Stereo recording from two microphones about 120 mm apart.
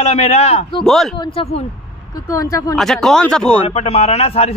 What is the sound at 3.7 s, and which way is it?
Speech, 60° left (ahead or behind).